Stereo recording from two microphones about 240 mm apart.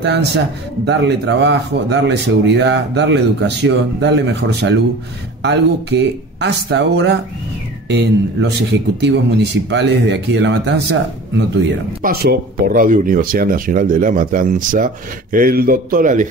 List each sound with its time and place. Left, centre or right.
0.8 s speech: right